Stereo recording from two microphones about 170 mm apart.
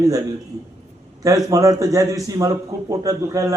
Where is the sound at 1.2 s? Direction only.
20° right (ahead or behind).